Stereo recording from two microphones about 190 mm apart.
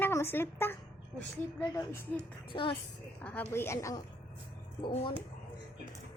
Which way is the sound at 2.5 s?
25° left (ahead or behind).